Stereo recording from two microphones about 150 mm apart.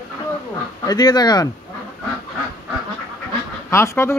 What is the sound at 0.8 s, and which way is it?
Speech, 25° left (ahead or behind).